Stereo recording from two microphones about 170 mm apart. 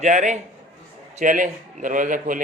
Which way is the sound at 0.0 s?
45° right (ahead or behind).